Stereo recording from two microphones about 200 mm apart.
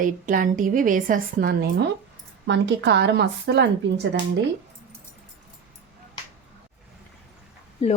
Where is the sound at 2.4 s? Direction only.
60° right (ahead or behind).